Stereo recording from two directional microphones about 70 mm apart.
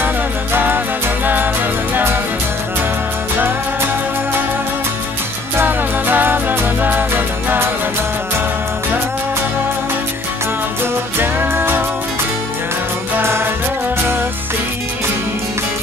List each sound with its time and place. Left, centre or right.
0.0 s music: right
3.3 s music: right
5.6 s music: right
10.8 s music: right
13.2 s music: right